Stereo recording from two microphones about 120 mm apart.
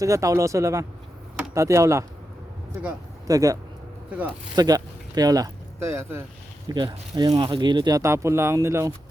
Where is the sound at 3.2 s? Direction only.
30° right (ahead or behind).